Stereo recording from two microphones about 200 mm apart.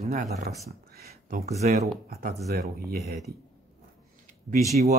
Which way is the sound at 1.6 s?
40° right (ahead or behind).